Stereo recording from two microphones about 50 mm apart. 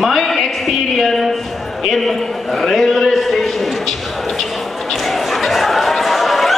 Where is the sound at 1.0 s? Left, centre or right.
Centre.